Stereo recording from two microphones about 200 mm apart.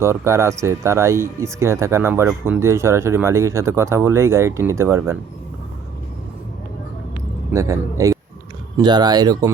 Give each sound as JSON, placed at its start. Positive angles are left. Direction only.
{"t": 0.0, "sound": "speech", "side_deg": -15}
{"t": 7.5, "sound": "speech", "side_deg": -15}